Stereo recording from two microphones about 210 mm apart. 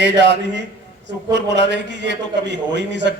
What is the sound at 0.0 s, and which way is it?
A man's voice, 55° right (ahead or behind).